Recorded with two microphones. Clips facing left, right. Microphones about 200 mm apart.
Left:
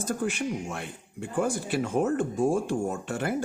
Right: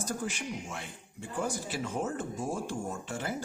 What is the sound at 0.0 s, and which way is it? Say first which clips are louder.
Speech: left 7 dB; 55° left (ahead or behind).